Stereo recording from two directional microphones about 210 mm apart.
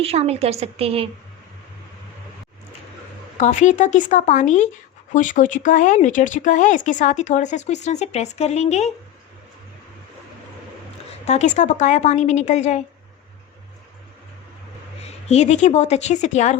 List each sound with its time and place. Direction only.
0.0 s a woman's voice: 30° right (ahead or behind)
3.3 s speech: 35° left (ahead or behind)
11.3 s speech: 35° left (ahead or behind)
15.3 s speech: 30° left (ahead or behind)